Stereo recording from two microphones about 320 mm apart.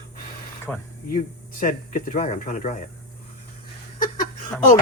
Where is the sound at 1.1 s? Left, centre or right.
Left.